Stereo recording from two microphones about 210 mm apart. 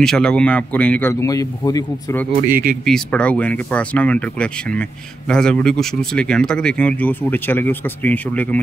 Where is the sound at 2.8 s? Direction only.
Centre (ahead or behind).